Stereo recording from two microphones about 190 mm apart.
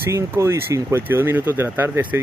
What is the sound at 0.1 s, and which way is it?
Speech, 15° right (ahead or behind).